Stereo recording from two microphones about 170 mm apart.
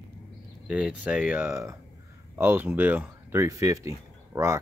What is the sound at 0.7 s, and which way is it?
Speech, 5° right (ahead or behind).